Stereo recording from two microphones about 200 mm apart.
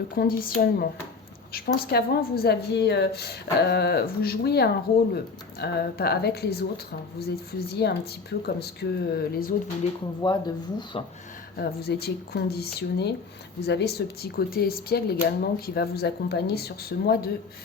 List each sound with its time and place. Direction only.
0.2 s a woman's voice: 45° left (ahead or behind)
7.7 s a woman's voice: 55° left (ahead or behind)
10.2 s speech: 20° left (ahead or behind)
11.5 s a woman's voice: 55° left (ahead or behind)